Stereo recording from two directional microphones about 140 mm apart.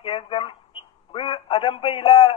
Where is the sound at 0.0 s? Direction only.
40° left (ahead or behind).